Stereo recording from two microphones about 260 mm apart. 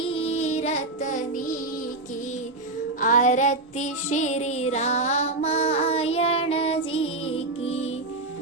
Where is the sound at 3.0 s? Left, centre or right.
Left.